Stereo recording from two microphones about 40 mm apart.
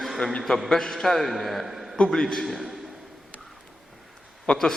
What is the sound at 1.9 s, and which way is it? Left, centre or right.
Speech, centre.